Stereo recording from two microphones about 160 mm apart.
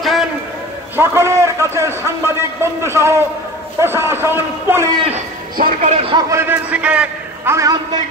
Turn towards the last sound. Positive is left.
turn(degrees=-20)  # may be behind; listen again after turning